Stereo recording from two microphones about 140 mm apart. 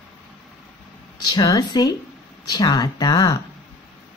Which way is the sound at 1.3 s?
30° left (ahead or behind).